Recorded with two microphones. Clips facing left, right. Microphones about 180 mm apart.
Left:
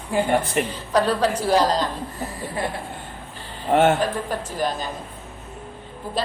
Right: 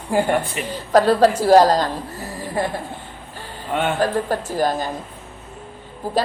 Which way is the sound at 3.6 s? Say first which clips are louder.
Left 5 dB; 45° left (ahead or behind).